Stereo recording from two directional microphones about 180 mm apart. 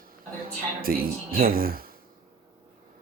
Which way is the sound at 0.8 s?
55° right (ahead or behind).